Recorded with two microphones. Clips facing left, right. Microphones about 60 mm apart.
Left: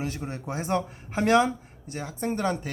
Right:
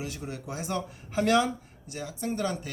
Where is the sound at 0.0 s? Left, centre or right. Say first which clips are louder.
Left 4 dB; left.